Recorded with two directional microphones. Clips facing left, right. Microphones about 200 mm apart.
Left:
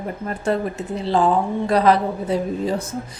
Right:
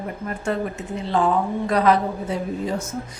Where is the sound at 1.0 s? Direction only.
35° left (ahead or behind).